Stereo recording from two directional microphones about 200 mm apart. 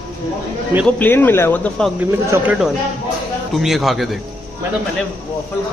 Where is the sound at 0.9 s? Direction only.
10° left (ahead or behind).